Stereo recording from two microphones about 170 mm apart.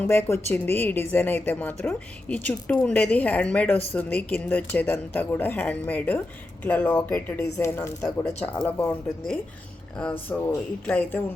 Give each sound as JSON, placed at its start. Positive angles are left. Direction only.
{"t": 0.0, "sound": "a woman's voice", "side_deg": 15}